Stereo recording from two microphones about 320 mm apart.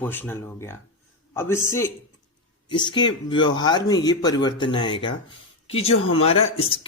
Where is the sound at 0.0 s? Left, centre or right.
Centre.